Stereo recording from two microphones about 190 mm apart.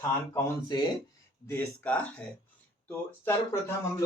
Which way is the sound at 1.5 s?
10° left (ahead or behind).